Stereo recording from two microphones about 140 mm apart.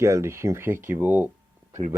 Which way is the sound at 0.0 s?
20° right (ahead or behind).